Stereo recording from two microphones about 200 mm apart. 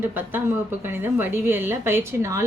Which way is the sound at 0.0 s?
10° right (ahead or behind).